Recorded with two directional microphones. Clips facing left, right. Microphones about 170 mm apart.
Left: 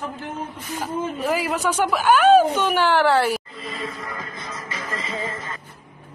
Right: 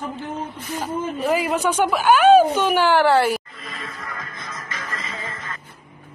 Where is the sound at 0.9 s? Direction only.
Centre (ahead or behind).